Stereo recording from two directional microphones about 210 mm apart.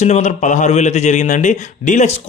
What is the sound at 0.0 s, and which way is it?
A man's voice, 35° left (ahead or behind).